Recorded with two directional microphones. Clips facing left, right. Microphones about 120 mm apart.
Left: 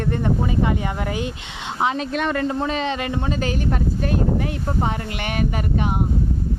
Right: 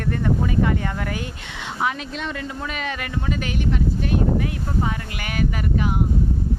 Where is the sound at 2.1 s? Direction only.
55° left (ahead or behind).